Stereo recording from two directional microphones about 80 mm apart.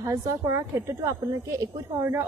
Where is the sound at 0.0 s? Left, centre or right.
Right.